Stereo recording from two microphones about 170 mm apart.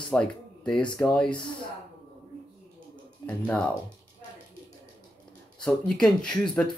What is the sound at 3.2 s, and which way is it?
Speech, 10° left (ahead or behind).